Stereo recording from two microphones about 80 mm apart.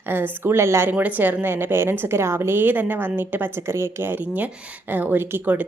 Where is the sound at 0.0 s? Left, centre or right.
Right.